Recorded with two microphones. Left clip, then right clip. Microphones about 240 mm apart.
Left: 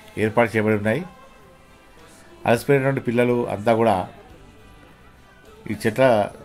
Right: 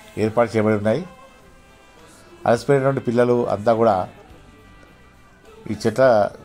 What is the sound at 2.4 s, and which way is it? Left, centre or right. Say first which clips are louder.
A man's voice: right 1 dB; centre.